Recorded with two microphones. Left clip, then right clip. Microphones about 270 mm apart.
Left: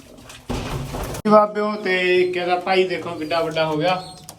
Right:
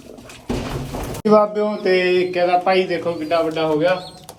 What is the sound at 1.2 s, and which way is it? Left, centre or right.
Speech, centre.